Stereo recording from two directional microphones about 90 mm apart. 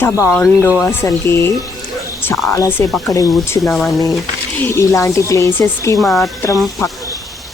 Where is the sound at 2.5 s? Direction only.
30° left (ahead or behind).